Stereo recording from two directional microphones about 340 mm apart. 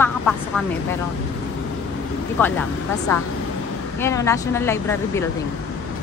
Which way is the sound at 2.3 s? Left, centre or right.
Centre.